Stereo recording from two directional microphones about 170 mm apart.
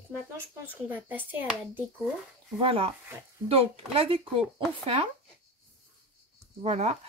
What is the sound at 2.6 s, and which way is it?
Speech, 35° right (ahead or behind).